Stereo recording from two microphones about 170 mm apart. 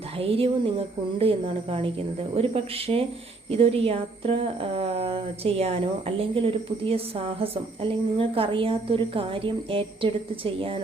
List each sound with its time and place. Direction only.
0.2 s a woman's voice: 35° right (ahead or behind)